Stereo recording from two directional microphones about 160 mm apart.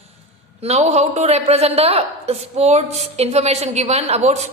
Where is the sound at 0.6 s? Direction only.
40° right (ahead or behind).